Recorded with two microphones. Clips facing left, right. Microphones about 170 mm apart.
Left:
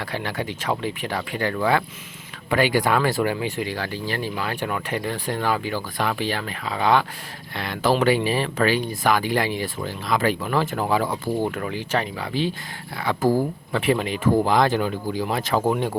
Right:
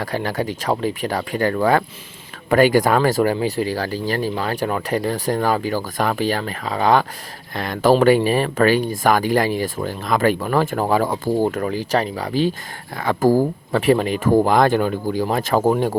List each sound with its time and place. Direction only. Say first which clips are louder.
0.0 s speech: right 5 dB; 40° right (ahead or behind)